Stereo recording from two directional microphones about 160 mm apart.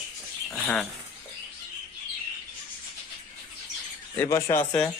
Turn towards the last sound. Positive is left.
turn(degrees=15)  # may be behind; listen again after turning